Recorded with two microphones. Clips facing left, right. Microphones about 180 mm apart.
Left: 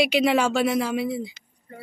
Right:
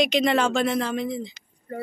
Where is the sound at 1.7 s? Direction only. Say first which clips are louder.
Right 10 dB; 45° right (ahead or behind).